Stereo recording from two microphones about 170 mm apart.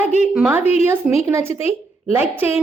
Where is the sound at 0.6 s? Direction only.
40° left (ahead or behind).